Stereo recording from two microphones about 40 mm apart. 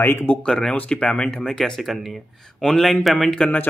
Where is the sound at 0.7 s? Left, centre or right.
Left.